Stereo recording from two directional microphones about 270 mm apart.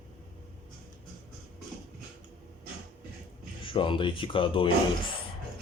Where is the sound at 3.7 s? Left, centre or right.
Centre.